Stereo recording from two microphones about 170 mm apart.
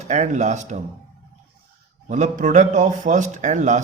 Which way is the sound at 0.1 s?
45° right (ahead or behind).